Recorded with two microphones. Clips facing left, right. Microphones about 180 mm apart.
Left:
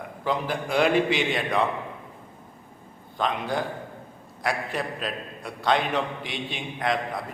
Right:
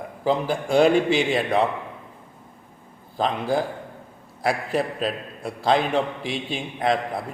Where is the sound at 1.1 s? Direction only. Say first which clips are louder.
Right 4 dB; 35° right (ahead or behind).